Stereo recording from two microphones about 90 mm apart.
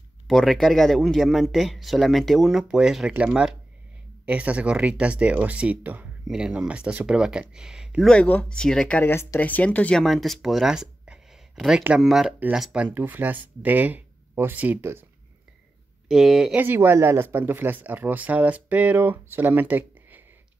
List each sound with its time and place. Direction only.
0.3 s speech: 5° left (ahead or behind)
8.1 s speech: 15° left (ahead or behind)
9.0 s speech: 30° left (ahead or behind)
10.0 s speech: centre (ahead or behind)
12.9 s speech: 20° right (ahead or behind)
16.1 s speech: 5° right (ahead or behind)
16.5 s speech: 20° right (ahead or behind)